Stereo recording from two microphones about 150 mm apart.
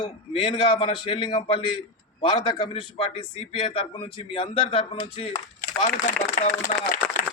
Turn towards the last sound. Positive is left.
turn(degrees=55)  # may be behind; listen again after turning